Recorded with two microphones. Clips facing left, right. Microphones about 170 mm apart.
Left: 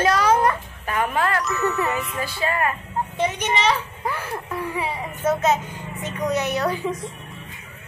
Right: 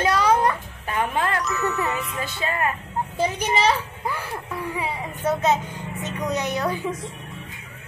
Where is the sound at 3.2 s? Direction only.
35° right (ahead or behind).